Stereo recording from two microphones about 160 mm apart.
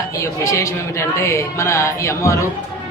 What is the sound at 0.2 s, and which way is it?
A man's voice, 20° left (ahead or behind).